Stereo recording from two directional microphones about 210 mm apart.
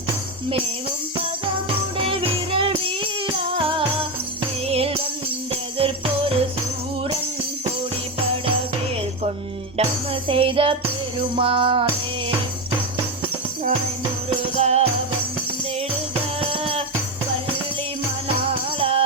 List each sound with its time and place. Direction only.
2.0 s music: 25° right (ahead or behind)
9.7 s music: 25° right (ahead or behind)
14.3 s music: 30° right (ahead or behind)
16.4 s music: 25° right (ahead or behind)
18.4 s music: 25° right (ahead or behind)